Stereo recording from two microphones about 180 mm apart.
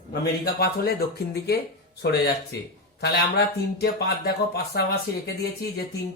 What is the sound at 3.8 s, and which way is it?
Speech, 65° left (ahead or behind).